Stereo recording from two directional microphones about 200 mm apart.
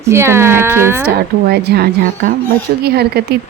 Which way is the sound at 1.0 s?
55° right (ahead or behind).